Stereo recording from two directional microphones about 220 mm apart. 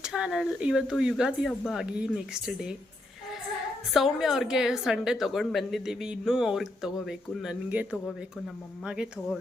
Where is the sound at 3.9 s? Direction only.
Centre (ahead or behind).